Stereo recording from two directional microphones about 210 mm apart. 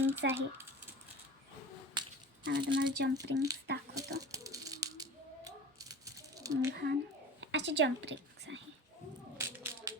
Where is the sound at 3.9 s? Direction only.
15° right (ahead or behind).